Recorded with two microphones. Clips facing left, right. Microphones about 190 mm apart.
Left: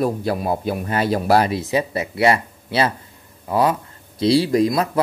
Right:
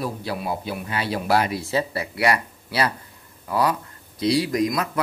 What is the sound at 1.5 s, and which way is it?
Speech, 20° left (ahead or behind).